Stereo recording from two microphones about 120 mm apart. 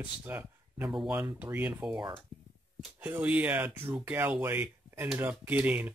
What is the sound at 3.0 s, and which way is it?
Speech, 10° right (ahead or behind).